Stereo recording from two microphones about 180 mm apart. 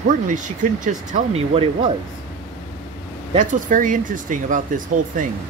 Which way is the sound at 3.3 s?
45° right (ahead or behind).